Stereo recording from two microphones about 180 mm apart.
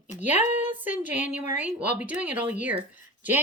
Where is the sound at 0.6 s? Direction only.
10° right (ahead or behind).